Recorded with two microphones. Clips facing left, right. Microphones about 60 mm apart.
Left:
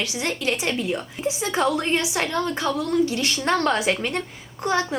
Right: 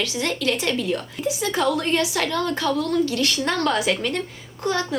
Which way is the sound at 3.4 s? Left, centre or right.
Left.